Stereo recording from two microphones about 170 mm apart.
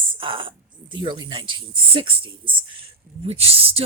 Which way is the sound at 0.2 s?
30° right (ahead or behind).